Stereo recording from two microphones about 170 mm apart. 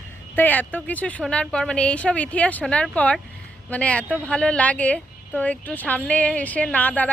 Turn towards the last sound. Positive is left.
turn(degrees=10)  # may be behind; listen again after turning